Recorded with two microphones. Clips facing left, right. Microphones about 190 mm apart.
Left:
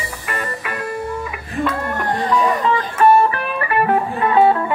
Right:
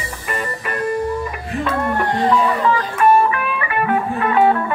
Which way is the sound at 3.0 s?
40° left (ahead or behind).